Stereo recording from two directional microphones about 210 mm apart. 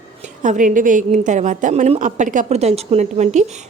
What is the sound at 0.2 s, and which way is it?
Speech, 35° right (ahead or behind).